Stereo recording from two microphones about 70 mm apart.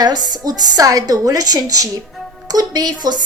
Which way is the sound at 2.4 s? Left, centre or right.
Right.